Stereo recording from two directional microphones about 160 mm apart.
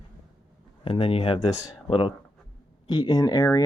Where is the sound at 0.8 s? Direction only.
35° left (ahead or behind).